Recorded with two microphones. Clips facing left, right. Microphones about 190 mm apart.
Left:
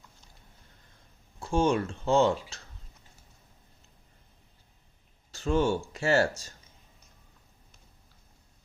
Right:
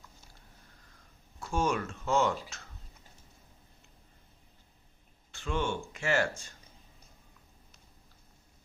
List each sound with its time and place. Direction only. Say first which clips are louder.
1.4 s speech: left 5 dB; 30° left (ahead or behind)
5.3 s speech: left 7 dB; 40° left (ahead or behind)